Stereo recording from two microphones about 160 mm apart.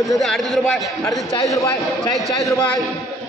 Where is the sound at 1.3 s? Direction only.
20° left (ahead or behind).